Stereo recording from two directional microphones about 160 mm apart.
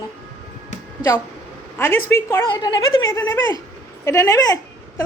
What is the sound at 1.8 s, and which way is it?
Speech, 15° left (ahead or behind).